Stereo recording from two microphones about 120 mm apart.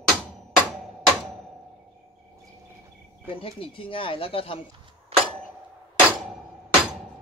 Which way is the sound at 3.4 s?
50° left (ahead or behind).